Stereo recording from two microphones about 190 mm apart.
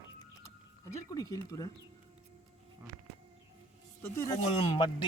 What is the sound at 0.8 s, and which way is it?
Speech, 20° left (ahead or behind).